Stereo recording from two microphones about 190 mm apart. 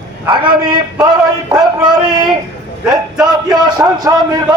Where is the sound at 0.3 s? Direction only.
25° right (ahead or behind).